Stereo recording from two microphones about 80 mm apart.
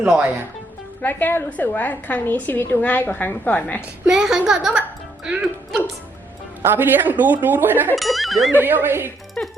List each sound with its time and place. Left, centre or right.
0.0 s a woman's voice: centre
1.0 s a woman's voice: left
4.0 s a woman's voice: centre
6.6 s speech: right
7.9 s speech: centre
8.5 s speech: right
9.4 s speech: centre